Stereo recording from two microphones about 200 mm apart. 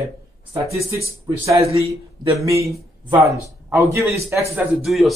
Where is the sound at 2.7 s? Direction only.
15° right (ahead or behind).